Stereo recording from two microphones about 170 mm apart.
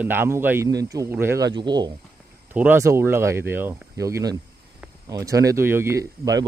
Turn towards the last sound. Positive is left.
turn(degrees=-20)  # may be behind; listen again after turning